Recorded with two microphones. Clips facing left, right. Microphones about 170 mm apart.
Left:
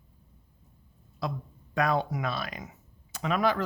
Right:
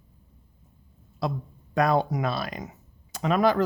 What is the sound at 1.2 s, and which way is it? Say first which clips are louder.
A man's voice: right 4 dB; 35° right (ahead or behind).